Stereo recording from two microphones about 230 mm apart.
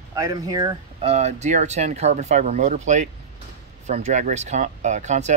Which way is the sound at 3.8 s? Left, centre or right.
Right.